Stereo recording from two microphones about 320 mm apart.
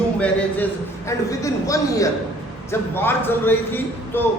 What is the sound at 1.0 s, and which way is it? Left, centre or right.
A man's voice, centre.